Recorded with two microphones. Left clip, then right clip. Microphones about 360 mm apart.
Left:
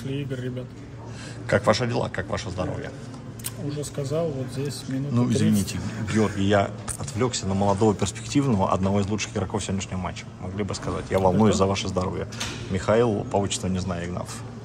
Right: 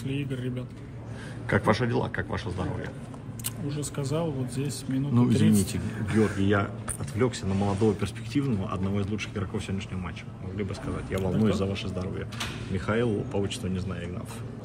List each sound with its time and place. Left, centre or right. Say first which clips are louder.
0.1 s speech: left 2 dB; centre